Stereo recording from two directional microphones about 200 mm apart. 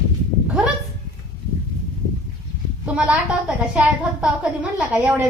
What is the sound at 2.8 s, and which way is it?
A woman's voice, 5° right (ahead or behind).